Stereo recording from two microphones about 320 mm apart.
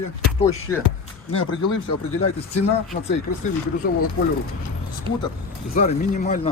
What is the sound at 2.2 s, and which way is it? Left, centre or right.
Speech, left.